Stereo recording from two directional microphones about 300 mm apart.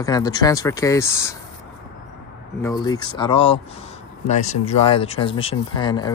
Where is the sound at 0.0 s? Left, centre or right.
Centre.